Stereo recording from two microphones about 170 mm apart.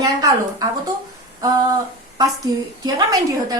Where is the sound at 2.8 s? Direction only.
20° right (ahead or behind).